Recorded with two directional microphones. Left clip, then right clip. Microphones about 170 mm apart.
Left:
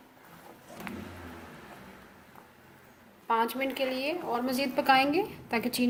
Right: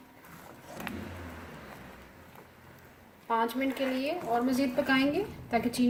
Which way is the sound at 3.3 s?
50° left (ahead or behind).